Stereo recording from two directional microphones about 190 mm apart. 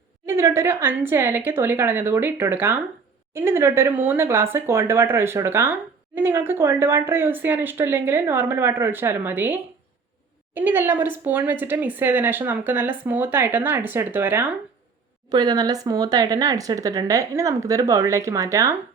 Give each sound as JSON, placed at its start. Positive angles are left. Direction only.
{"t": 0.3, "sound": "a woman's voice", "side_deg": -15}
{"t": 15.3, "sound": "speech", "side_deg": -20}